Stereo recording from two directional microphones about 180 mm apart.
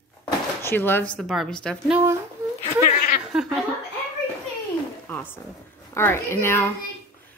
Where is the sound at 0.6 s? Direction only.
10° left (ahead or behind).